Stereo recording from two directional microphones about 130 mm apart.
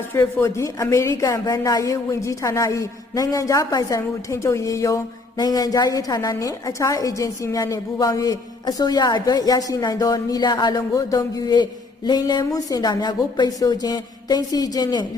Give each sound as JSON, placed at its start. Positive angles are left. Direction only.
{"t": 0.1, "sound": "a woman's voice", "side_deg": 20}